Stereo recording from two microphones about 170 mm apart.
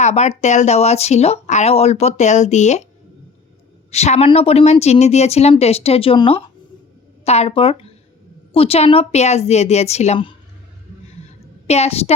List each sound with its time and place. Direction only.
0.0 s speech: 40° left (ahead or behind)
3.9 s speech: 40° left (ahead or behind)
11.6 s speech: 40° left (ahead or behind)